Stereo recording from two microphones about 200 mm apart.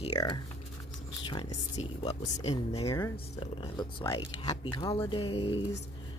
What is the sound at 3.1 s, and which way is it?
Speech, 25° left (ahead or behind).